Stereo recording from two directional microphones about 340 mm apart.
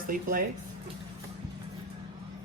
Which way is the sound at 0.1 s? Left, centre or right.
Right.